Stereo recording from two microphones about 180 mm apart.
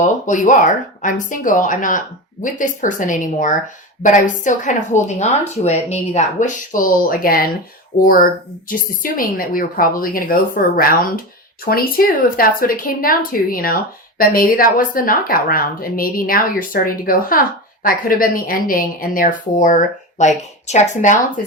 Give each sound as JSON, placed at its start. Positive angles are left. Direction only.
{"t": 0.0, "sound": "speech", "side_deg": 45}